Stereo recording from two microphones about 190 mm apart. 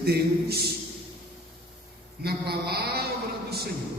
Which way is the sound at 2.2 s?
55° right (ahead or behind).